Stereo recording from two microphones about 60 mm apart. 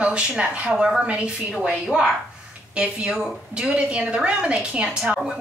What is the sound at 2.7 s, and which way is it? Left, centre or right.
A woman's voice, centre.